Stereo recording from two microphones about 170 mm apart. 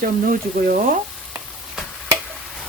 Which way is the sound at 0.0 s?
60° right (ahead or behind).